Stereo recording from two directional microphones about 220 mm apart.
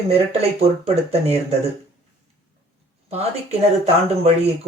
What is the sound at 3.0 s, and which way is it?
Speech, 30° right (ahead or behind).